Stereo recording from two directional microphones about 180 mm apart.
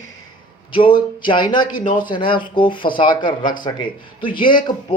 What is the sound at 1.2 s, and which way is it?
Speech, 25° left (ahead or behind).